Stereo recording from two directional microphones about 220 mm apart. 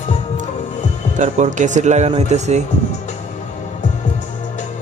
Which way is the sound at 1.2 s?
35° right (ahead or behind).